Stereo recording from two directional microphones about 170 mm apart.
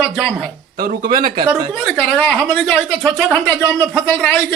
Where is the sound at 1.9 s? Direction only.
5° left (ahead or behind).